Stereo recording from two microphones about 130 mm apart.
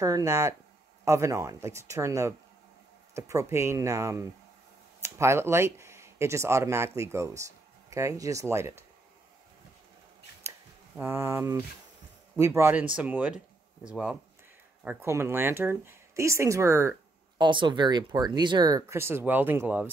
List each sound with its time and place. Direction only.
0.0 s speech: 25° right (ahead or behind)
10.4 s a sound: 20° right (ahead or behind)
11.0 s speech: 20° right (ahead or behind)
14.9 s speech: 20° right (ahead or behind)
17.4 s speech: 35° right (ahead or behind); by 19.9 s 15° right (ahead or behind)